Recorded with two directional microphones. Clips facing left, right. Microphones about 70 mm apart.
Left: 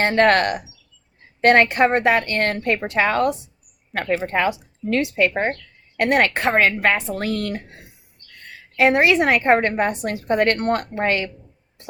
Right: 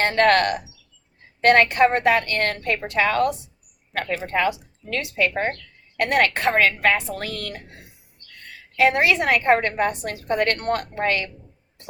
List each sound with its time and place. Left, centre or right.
0.0 s a woman's voice: left
8.7 s a woman's voice: left